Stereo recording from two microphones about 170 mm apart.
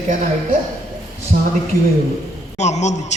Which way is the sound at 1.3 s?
50° right (ahead or behind).